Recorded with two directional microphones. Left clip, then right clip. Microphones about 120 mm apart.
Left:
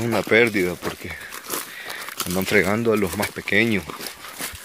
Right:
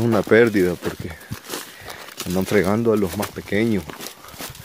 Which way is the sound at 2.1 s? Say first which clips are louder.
Right 2 dB; 20° right (ahead or behind).